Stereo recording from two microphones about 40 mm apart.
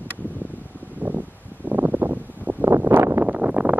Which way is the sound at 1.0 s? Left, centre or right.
Right.